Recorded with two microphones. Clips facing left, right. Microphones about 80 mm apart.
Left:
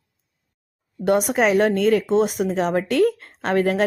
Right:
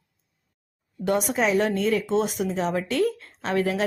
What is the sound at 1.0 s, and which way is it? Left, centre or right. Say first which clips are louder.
Speech: left 5 dB; left.